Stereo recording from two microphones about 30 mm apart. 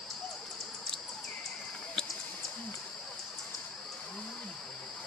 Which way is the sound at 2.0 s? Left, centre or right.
Left.